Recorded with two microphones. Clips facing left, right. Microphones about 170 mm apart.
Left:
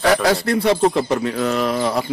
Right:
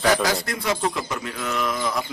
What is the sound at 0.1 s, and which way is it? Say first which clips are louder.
Speech: left 6 dB; 30° left (ahead or behind).